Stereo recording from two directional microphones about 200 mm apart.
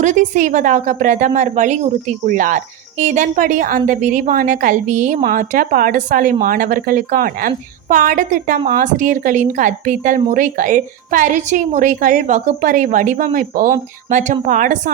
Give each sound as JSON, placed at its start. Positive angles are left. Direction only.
{"t": 0.0, "sound": "a woman's voice", "side_deg": -40}